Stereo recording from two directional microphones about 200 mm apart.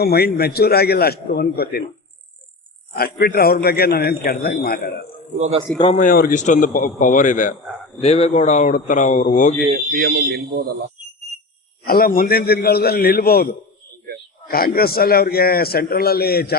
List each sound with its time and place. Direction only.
0.0 s a man's voice: 50° left (ahead or behind)
2.9 s a man's voice: 50° left (ahead or behind)
5.4 s a man's voice: 30° right (ahead or behind)
6.0 s a man's voice: 45° left (ahead or behind)
9.6 s speech: 40° right (ahead or behind)
11.9 s a man's voice: 45° left (ahead or behind)